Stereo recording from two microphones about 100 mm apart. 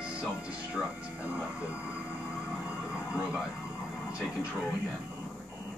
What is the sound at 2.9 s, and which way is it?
Vehicle, 10° right (ahead or behind).